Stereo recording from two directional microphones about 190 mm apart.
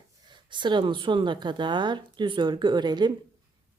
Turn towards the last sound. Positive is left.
turn(degrees=-25)  # may be behind; listen again after turning